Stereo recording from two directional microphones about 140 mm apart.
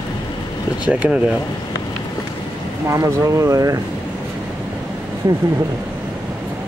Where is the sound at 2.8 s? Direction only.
20° right (ahead or behind).